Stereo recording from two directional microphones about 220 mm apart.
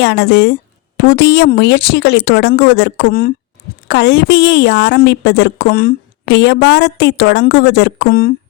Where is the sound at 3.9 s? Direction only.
55° left (ahead or behind).